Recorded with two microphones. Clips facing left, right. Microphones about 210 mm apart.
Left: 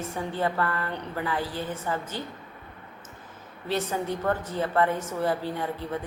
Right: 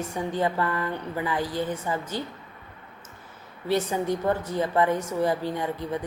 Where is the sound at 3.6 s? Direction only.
15° right (ahead or behind).